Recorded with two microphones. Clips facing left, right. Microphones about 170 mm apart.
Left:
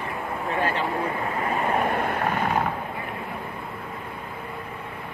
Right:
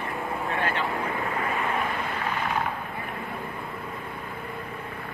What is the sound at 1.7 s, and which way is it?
Vehicle, 55° left (ahead or behind).